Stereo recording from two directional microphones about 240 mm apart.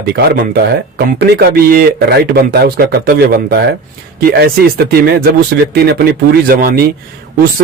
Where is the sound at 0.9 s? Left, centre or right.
Right.